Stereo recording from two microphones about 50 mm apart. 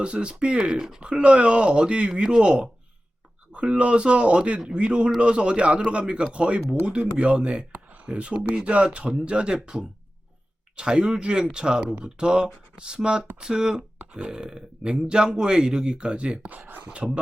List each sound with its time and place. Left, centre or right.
0.0 s speech: centre
7.7 s a sound: right
8.0 s a man's voice: right
16.8 s speech: right